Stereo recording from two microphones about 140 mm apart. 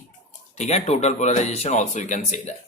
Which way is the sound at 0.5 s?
55° left (ahead or behind).